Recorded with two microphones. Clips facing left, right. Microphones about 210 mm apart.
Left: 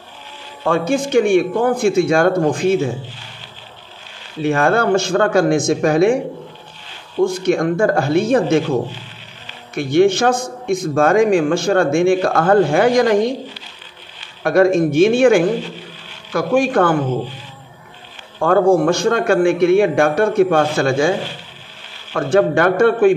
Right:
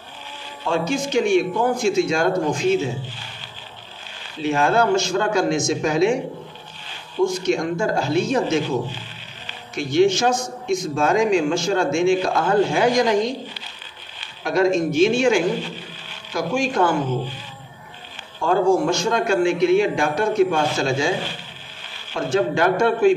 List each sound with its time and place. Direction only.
0.7 s a man's voice: 55° left (ahead or behind)
4.4 s a man's voice: 55° left (ahead or behind)
7.2 s a man's voice: 55° left (ahead or behind)
9.8 s a man's voice: 55° left (ahead or behind)
14.4 s a man's voice: 55° left (ahead or behind)
18.4 s a man's voice: 55° left (ahead or behind)
22.1 s a man's voice: 55° left (ahead or behind)